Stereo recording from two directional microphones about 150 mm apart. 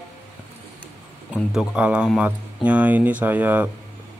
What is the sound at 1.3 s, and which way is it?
Speech, 5° right (ahead or behind).